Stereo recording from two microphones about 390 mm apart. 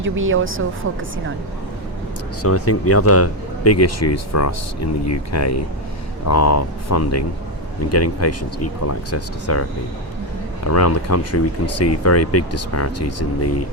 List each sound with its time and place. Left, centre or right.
0.0 s speech: right
2.4 s speech: left